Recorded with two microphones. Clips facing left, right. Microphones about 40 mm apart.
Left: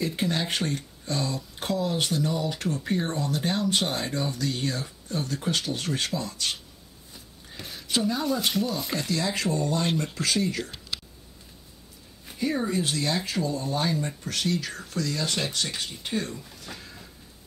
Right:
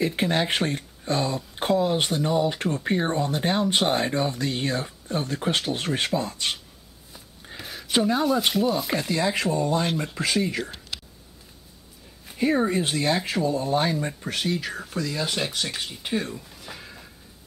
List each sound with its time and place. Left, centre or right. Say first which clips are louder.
0.0 s speech: right 4 dB; right
7.5 s a sound: right 3 dB; centre
7.9 s speech: right 4 dB; right
8.2 s speech: right 4 dB; centre
12.4 s speech: right 5 dB; right